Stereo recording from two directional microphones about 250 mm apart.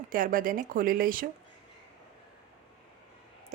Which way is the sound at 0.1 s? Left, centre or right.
Right.